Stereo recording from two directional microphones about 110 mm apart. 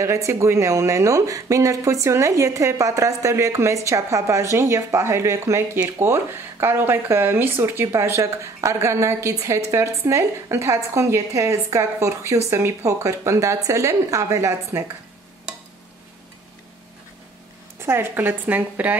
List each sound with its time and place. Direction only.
0.0 s speech: 30° right (ahead or behind)
17.7 s a woman's voice: 20° right (ahead or behind)